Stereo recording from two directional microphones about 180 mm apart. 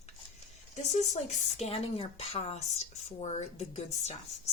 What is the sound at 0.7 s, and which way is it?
Speech, 35° left (ahead or behind).